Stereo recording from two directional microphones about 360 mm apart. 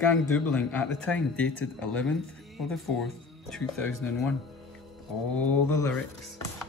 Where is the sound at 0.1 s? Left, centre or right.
Centre.